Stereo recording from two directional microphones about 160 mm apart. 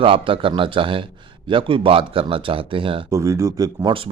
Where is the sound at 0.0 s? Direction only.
35° right (ahead or behind).